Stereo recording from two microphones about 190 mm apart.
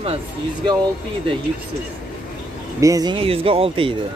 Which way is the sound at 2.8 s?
20° right (ahead or behind).